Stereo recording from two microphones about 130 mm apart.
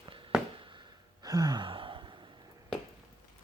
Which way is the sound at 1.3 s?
30° right (ahead or behind).